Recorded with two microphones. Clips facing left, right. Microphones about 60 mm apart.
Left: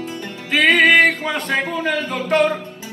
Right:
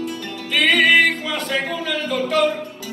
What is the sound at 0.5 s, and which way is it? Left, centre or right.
Music, left.